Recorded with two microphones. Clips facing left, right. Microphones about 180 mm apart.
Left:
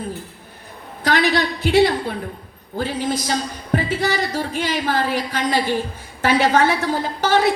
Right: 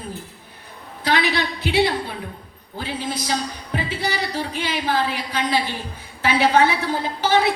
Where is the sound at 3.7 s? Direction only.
50° left (ahead or behind).